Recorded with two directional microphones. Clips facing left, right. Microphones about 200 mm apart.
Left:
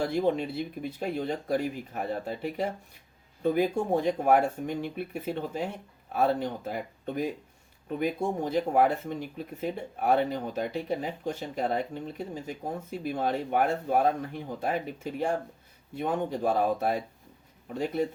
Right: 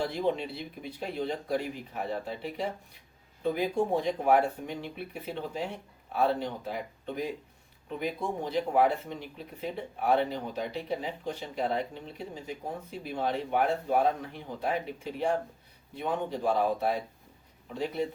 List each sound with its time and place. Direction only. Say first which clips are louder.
0.0 s speech: left 3 dB; 50° left (ahead or behind)